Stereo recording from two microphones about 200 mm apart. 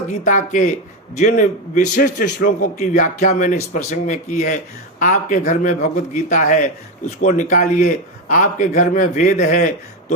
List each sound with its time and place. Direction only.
0.3 s a man's voice: 40° left (ahead or behind)